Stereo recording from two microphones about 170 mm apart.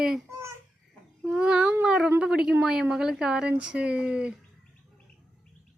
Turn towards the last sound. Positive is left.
turn(degrees=-5)  # may be behind; listen again after turning